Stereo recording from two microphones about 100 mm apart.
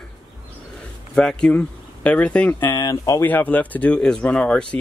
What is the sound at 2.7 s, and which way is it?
Speech, 35° left (ahead or behind).